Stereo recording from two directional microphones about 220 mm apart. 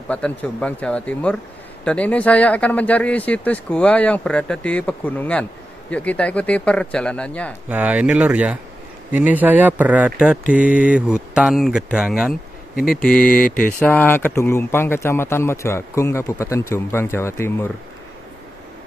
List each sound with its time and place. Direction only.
0.1 s speech: 5° left (ahead or behind)
7.7 s speech: 5° right (ahead or behind)
10.6 s mantra: 35° left (ahead or behind)
10.9 s speech: 5° right (ahead or behind)
12.7 s speech: 40° left (ahead or behind)
13.0 s speech: 5° left (ahead or behind)
13.4 s mantra: 40° left (ahead or behind)
13.7 s speech: 10° left (ahead or behind)